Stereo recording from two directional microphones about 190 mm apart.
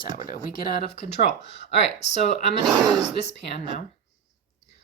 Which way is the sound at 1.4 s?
65° left (ahead or behind).